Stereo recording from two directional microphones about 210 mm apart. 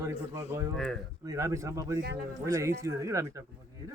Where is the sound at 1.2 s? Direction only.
15° right (ahead or behind).